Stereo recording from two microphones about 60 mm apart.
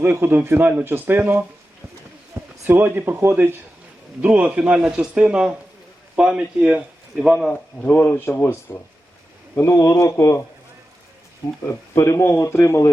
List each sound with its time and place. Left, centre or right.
0.0 s speech: right
2.6 s speech: right
4.2 s speech: centre
7.3 s speech: centre
8.1 s speech: left
11.9 s speech: left